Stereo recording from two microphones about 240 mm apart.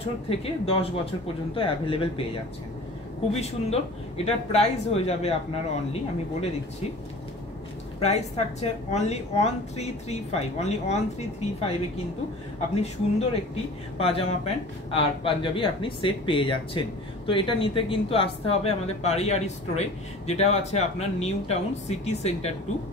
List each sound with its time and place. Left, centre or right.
0.3 s speech: left
3.3 s speech: left
8.0 s speech: left
12.7 s speech: left